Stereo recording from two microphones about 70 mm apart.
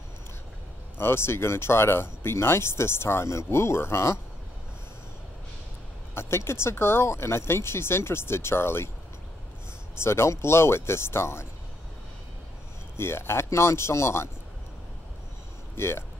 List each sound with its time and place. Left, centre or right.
0.9 s speech: left
6.1 s speech: left
9.9 s speech: left
12.9 s speech: left
15.7 s speech: left